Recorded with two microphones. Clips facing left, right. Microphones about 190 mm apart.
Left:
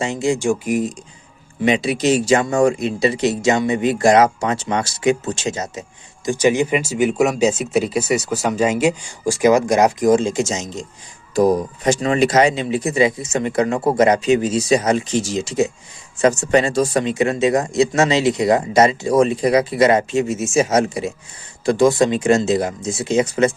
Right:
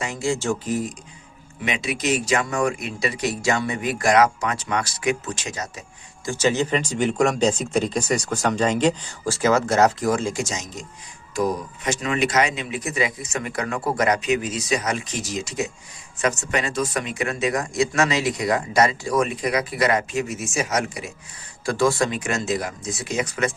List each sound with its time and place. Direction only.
0.0 s speech: 20° left (ahead or behind)
1.6 s speech: 35° left (ahead or behind)
6.2 s speech: 15° left (ahead or behind)
11.3 s speech: 35° left (ahead or behind)